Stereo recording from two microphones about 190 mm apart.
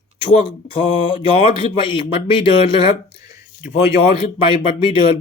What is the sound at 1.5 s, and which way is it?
Speech, 25° left (ahead or behind).